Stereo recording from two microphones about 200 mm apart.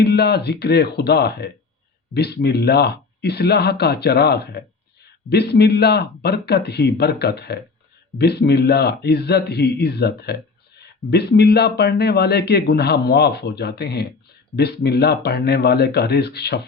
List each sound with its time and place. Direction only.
0.0 s speech: 55° left (ahead or behind)